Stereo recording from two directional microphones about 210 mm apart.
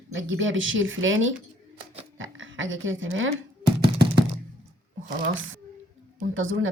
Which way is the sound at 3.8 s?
50° right (ahead or behind).